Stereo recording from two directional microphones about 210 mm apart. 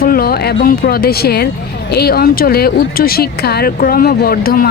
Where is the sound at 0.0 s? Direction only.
45° left (ahead or behind).